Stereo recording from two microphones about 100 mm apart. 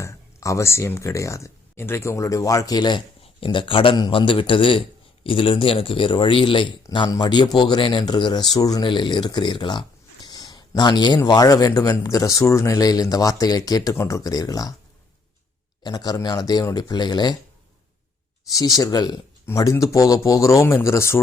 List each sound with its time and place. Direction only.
0.0 s speech: 30° left (ahead or behind)
3.4 s speech: 55° left (ahead or behind); by 8.9 s 40° left (ahead or behind)
8.9 s speech: 50° left (ahead or behind)
10.2 s a sound: 40° left (ahead or behind)
11.3 s speech: 40° left (ahead or behind)
15.8 s speech: 45° left (ahead or behind)
18.5 s speech: 40° left (ahead or behind)
19.5 s speech: 30° left (ahead or behind)